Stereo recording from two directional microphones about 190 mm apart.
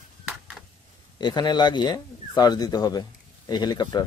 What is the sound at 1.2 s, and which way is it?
Speech, 25° left (ahead or behind).